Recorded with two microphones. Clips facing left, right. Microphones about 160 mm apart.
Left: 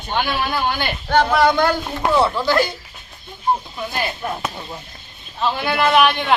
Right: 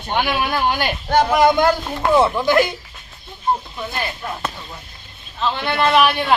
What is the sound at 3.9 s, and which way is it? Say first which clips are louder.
A man's voice: left 3 dB; 15° left (ahead or behind).